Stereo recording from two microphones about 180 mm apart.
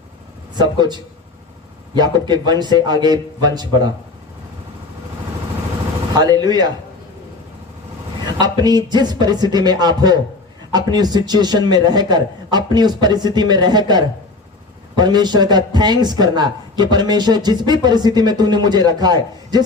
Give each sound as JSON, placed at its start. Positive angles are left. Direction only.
{"t": 0.5, "sound": "a man's voice", "side_deg": -25}
{"t": 6.1, "sound": "a man's voice", "side_deg": -20}
{"t": 8.4, "sound": "a man's voice", "side_deg": -25}